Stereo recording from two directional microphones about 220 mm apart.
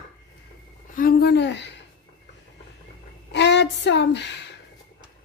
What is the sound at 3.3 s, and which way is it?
Speech, 55° left (ahead or behind).